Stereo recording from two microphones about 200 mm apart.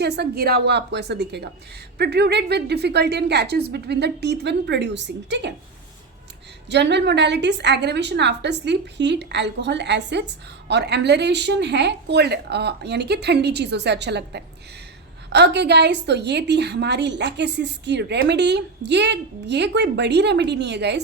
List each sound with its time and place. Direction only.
0.0 s a woman's voice: 55° right (ahead or behind)
6.7 s a woman's voice: 60° right (ahead or behind)